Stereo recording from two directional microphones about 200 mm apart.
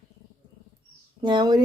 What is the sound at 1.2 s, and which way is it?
Speech, 20° right (ahead or behind).